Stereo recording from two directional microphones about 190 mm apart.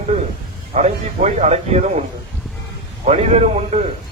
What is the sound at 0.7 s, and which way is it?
A man's voice, 35° right (ahead or behind).